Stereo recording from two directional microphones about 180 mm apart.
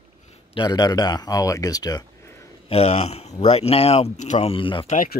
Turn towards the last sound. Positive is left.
turn(degrees=30)  # may be behind; listen again after turning